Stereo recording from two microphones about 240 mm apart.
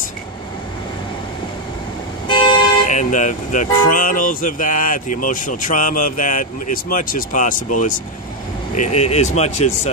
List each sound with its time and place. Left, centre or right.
2.2 s vehicle: centre
2.9 s speech: left